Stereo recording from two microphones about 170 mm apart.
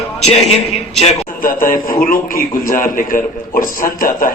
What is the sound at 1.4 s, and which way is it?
A man's voice, 55° left (ahead or behind).